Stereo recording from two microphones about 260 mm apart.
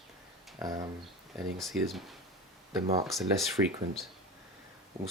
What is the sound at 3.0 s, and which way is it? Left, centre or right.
Speech, centre.